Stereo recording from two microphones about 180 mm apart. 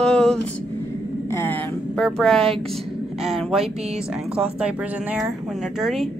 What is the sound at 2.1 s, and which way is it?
A woman's voice, centre (ahead or behind).